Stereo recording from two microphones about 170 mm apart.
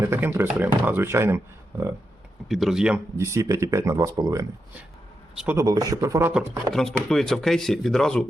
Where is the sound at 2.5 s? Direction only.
Centre (ahead or behind).